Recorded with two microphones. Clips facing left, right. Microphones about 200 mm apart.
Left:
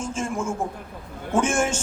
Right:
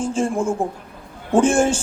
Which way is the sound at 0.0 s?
30° right (ahead or behind).